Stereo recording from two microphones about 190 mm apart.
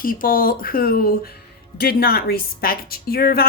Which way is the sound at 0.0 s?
50° left (ahead or behind).